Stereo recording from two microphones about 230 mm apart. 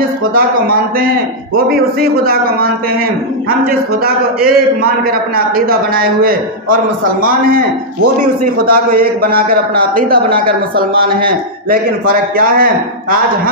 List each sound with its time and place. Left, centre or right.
0.3 s a man's voice: right
5.7 s a man's voice: right
8.9 s a man's voice: right